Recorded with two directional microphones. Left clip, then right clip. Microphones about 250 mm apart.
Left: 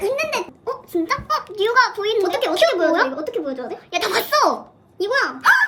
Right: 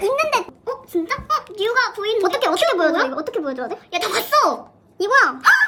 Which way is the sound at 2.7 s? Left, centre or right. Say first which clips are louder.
Right 1 dB; centre.